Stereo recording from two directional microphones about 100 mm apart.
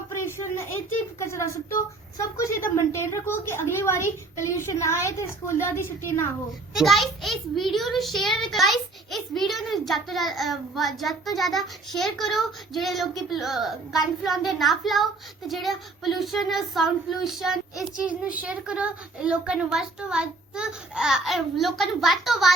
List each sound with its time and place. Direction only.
0.2 s a sound: 25° left (ahead or behind)
1.2 s a woman's voice: 30° left (ahead or behind)
6.7 s a child's voice: centre (ahead or behind)